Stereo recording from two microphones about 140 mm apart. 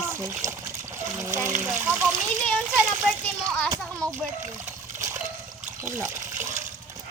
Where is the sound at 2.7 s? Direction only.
5° right (ahead or behind).